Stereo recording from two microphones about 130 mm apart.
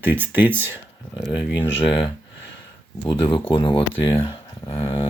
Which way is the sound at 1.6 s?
40° left (ahead or behind).